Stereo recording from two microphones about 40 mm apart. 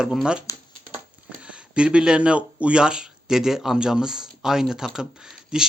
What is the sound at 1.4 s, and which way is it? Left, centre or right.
Speech, right.